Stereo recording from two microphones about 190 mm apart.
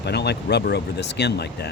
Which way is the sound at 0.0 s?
60° left (ahead or behind).